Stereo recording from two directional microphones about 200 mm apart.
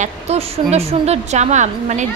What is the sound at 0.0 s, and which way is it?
A woman's voice, 30° right (ahead or behind).